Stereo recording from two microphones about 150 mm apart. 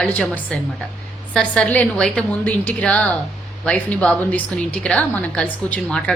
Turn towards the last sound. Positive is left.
turn(degrees=10)  # may be behind; listen again after turning